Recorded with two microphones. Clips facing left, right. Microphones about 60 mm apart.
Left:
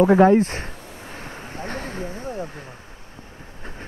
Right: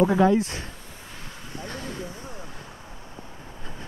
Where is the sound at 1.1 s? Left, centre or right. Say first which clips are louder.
Left 5 dB; left.